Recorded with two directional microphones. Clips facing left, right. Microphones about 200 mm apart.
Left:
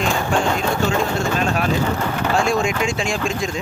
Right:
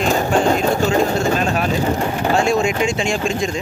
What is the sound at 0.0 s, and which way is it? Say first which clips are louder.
Music: right 4 dB; 40° right (ahead or behind).